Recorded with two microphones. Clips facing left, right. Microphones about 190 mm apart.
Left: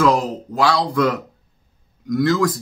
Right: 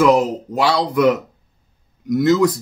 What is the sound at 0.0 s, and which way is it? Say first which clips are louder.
Speech: right 3 dB; 20° right (ahead or behind).